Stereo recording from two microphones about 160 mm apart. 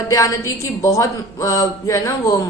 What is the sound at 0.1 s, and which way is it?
A woman's voice, 20° left (ahead or behind).